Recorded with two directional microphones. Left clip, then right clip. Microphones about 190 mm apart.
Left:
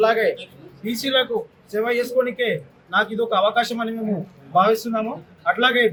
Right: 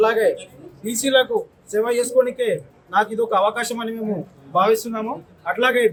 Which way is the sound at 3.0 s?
15° right (ahead or behind).